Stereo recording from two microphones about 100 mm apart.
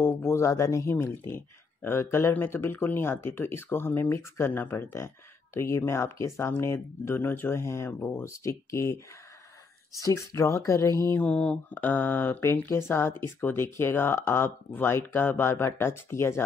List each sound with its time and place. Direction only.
0.0 s speech: 25° left (ahead or behind)
9.9 s speech: 30° left (ahead or behind)
11.2 s speech: 10° left (ahead or behind)